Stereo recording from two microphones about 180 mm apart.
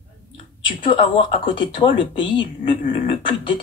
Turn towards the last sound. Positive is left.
turn(degrees=30)  # may be behind; listen again after turning